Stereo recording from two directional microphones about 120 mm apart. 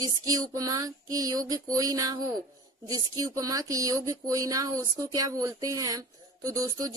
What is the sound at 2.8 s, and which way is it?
Speech, 30° right (ahead or behind).